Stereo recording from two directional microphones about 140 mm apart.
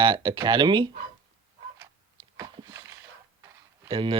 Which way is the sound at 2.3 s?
25° right (ahead or behind).